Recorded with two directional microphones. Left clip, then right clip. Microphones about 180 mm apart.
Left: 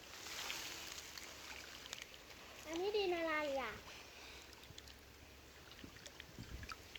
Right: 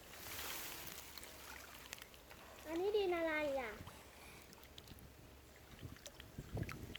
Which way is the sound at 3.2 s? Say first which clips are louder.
Even; 40° right (ahead or behind).